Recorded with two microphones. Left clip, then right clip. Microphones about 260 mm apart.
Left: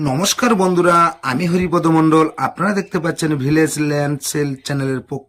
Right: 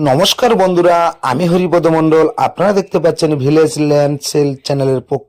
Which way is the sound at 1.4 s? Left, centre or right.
Right.